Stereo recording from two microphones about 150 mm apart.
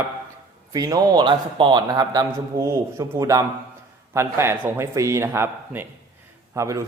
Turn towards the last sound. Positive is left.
turn(degrees=-20)  # may be behind; listen again after turning